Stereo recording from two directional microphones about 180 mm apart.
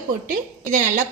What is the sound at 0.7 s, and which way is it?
Speech, 50° right (ahead or behind).